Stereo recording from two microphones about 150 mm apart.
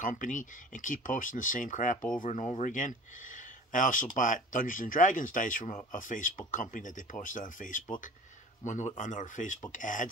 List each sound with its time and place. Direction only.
0.0 s speech: 60° left (ahead or behind)